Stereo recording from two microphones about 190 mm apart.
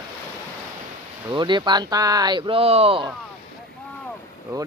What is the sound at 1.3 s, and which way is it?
Speech, 25° right (ahead or behind).